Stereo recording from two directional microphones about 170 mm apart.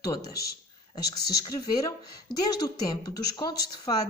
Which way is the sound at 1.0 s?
70° left (ahead or behind).